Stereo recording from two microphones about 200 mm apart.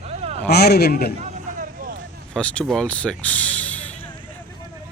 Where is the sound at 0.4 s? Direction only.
55° left (ahead or behind).